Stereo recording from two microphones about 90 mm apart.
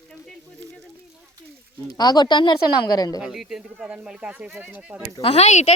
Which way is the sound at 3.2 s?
5° right (ahead or behind).